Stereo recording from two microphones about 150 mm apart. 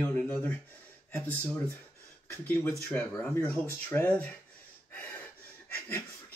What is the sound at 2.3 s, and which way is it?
Speech, 15° left (ahead or behind).